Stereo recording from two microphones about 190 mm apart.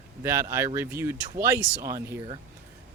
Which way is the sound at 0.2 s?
15° right (ahead or behind).